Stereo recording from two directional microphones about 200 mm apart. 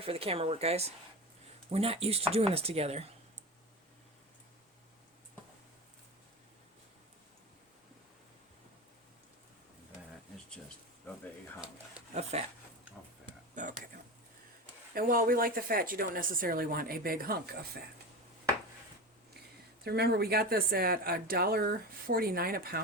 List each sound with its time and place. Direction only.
0.0 s speech: 30° right (ahead or behind)
12.3 s speech: 35° right (ahead or behind)
14.9 s speech: 45° right (ahead or behind)
19.8 s speech: 55° right (ahead or behind)